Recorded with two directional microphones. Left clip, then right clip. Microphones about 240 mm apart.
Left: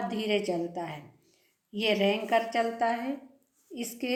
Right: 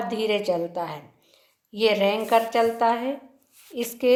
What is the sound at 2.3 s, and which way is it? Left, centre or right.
Speech, right.